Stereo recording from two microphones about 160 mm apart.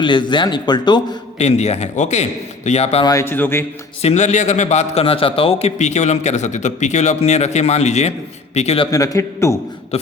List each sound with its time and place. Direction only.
0.0 s speech: 30° left (ahead or behind)
1.4 s a man's voice: 45° left (ahead or behind)
3.0 s speech: 20° left (ahead or behind)
4.0 s a man's voice: 45° left (ahead or behind)
8.9 s speech: 20° left (ahead or behind)
9.9 s speech: 40° left (ahead or behind)